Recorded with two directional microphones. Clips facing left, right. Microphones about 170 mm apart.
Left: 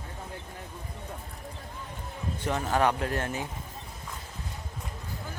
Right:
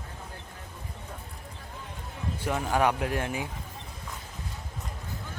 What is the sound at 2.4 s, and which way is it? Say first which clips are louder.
Speech: even; 10° right (ahead or behind).